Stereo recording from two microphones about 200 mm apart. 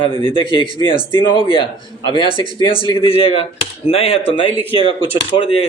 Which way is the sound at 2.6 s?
25° left (ahead or behind).